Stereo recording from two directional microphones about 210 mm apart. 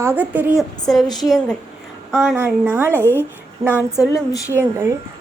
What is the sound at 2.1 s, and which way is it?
Speech, 5° right (ahead or behind).